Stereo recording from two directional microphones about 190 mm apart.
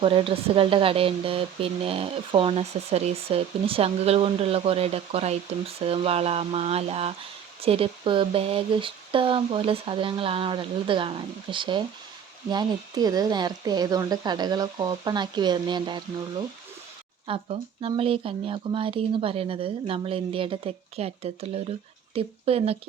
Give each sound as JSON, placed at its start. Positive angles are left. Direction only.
{"t": 0.0, "sound": "a woman's voice", "side_deg": -25}